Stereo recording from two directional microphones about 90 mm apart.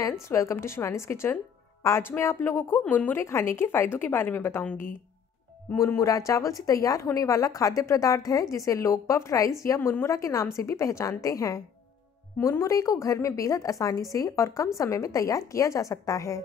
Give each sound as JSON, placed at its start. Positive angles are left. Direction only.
{"t": 0.2, "sound": "speech", "side_deg": 35}
{"t": 5.8, "sound": "a woman's voice", "side_deg": 35}